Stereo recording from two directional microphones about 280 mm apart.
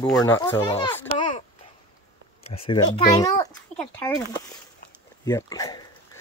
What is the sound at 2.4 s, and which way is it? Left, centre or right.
A child's voice, centre.